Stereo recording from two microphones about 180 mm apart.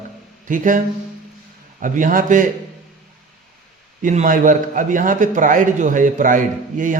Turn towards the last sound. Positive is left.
turn(degrees=-45)  # may be behind; listen again after turning